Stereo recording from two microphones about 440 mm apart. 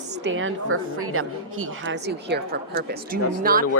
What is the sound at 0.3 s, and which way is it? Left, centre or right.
A woman's voice, right.